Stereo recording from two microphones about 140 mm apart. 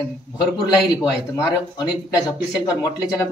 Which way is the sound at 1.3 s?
25° left (ahead or behind).